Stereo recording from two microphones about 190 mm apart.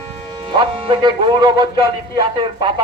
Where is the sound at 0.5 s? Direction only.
20° right (ahead or behind).